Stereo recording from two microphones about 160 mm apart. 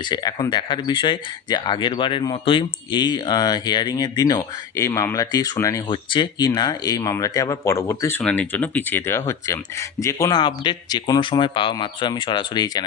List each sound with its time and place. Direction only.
0.0 s speech: 25° left (ahead or behind)